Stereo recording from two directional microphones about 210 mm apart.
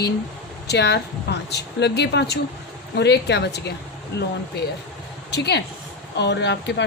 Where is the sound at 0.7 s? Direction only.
55° left (ahead or behind).